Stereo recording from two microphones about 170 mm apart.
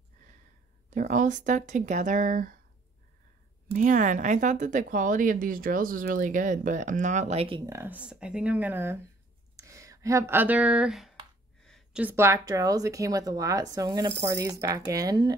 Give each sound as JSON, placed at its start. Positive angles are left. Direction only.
{"t": 0.8, "sound": "a woman's voice", "side_deg": -50}
{"t": 3.7, "sound": "a woman's voice", "side_deg": -50}
{"t": 7.6, "sound": "speech", "side_deg": -15}
{"t": 11.6, "sound": "a sound", "side_deg": 0}
{"t": 12.0, "sound": "speech", "side_deg": -15}